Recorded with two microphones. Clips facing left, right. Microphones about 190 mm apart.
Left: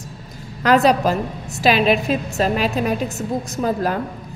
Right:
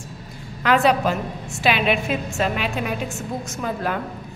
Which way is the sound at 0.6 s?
40° left (ahead or behind).